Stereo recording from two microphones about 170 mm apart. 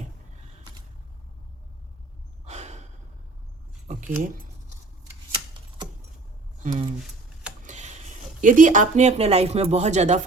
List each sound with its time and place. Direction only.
2.4 s gasp: 40° right (ahead or behind)
3.8 s speech: 50° right (ahead or behind)
6.6 s speech: 45° right (ahead or behind)
7.6 s a sound: 45° right (ahead or behind)
8.4 s speech: 50° right (ahead or behind)